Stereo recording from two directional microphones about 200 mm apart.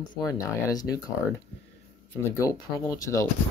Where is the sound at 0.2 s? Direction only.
15° left (ahead or behind).